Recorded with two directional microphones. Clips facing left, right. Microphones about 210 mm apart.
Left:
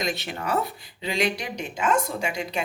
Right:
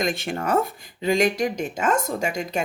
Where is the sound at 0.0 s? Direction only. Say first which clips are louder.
Right 4 dB; 50° right (ahead or behind).